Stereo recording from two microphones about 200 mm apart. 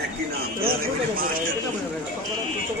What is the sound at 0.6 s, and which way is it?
Speech, 45° right (ahead or behind).